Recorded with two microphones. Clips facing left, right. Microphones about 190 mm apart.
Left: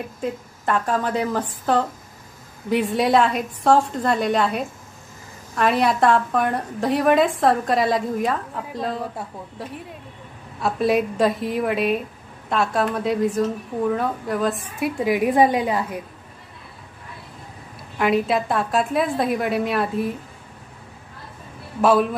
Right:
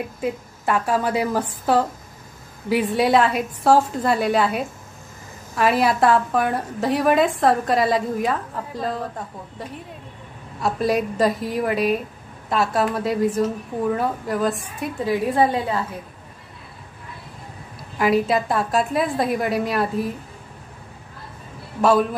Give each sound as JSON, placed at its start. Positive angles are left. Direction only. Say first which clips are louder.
{"t": 0.2, "sound": "a woman's voice", "louder": "even", "side_deg": -10}
{"t": 15.0, "sound": "a woman's voice", "louder": "left 2 dB", "side_deg": 15}
{"t": 17.9, "sound": "a woman's voice", "louder": "right 1 dB", "side_deg": 0}